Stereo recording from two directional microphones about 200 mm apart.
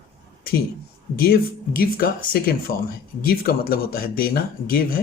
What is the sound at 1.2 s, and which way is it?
Speech, 50° left (ahead or behind).